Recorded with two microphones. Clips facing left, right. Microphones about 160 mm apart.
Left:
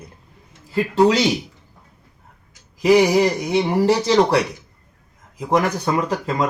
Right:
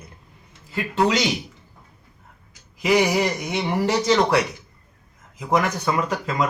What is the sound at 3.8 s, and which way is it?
Speech, 30° left (ahead or behind).